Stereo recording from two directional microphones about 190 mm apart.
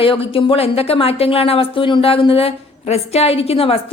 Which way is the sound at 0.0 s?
30° left (ahead or behind).